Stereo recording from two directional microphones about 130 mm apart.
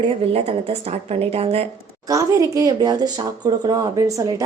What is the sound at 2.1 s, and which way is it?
A woman's voice, 25° right (ahead or behind).